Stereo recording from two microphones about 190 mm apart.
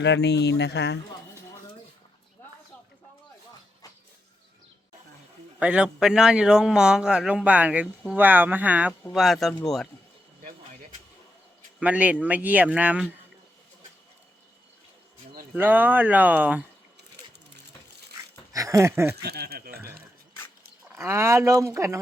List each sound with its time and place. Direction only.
0.0 s speech: 65° left (ahead or behind)
5.5 s a man's voice: 5° right (ahead or behind)
11.8 s speech: 5° right (ahead or behind)
15.5 s speech: 10° right (ahead or behind)
18.5 s speech: 15° right (ahead or behind)
19.1 s speech: 55° right (ahead or behind)
20.9 s speech: 15° right (ahead or behind)